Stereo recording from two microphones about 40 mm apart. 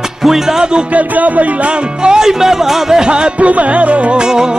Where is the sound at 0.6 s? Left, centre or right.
Right.